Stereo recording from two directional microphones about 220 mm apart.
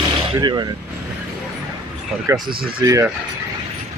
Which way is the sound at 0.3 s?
20° right (ahead or behind).